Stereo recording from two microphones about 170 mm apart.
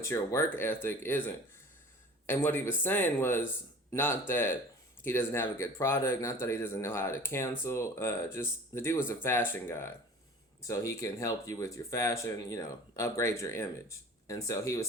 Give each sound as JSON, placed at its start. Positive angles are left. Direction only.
{"t": 0.0, "sound": "speech", "side_deg": 15}